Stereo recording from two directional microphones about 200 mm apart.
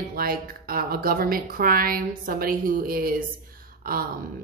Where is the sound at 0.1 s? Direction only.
45° right (ahead or behind).